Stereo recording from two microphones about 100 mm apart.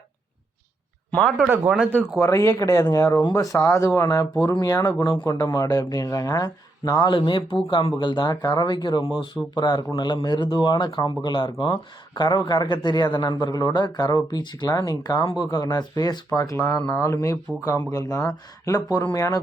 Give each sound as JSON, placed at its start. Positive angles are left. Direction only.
{"t": 1.5, "sound": "speech", "side_deg": -10}
{"t": 1.9, "sound": "speech", "side_deg": 10}
{"t": 2.2, "sound": "a man's voice", "side_deg": 35}